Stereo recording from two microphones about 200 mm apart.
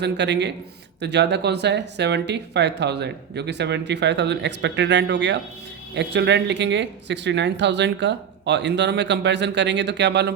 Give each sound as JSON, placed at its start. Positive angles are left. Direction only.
{"t": 0.0, "sound": "speech", "side_deg": -60}